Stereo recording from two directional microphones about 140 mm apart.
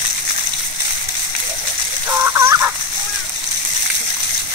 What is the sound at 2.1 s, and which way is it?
Fowl, 20° right (ahead or behind).